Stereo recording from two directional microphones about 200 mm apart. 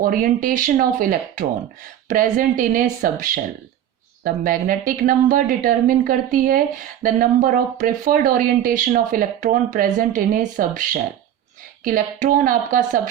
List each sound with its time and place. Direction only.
0.0 s speech: 45° right (ahead or behind)